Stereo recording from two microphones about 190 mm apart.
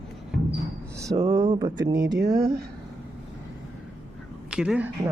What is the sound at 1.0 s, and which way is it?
Speech, 20° right (ahead or behind).